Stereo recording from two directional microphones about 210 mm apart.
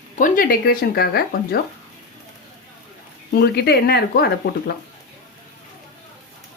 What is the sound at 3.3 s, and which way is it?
Speech, 50° left (ahead or behind).